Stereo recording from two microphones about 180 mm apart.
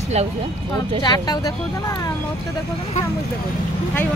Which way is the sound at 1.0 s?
20° left (ahead or behind).